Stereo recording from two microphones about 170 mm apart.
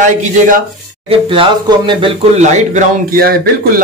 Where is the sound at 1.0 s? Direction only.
30° right (ahead or behind).